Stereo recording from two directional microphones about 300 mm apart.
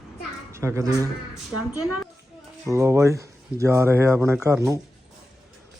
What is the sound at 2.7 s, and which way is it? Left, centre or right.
Speech, centre.